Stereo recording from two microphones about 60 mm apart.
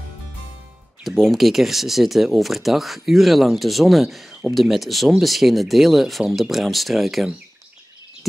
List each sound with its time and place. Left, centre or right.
1.0 s speech: centre